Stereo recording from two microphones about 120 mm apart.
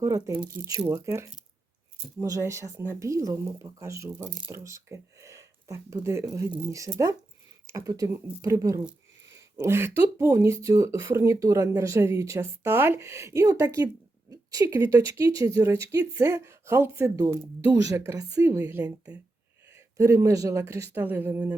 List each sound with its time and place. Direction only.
0.0 s speech: 25° right (ahead or behind)
18.8 s speech: 10° right (ahead or behind)
19.6 s a woman's voice: 20° right (ahead or behind)